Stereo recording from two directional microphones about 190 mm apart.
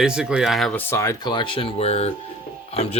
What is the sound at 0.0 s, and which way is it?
Speech, 5° right (ahead or behind).